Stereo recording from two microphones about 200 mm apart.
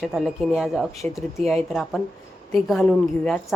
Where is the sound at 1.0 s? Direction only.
15° left (ahead or behind).